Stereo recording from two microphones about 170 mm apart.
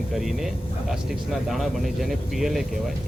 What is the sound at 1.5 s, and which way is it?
A man's voice, centre (ahead or behind).